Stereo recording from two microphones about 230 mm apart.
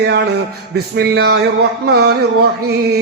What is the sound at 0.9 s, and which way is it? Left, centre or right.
A man's voice, right.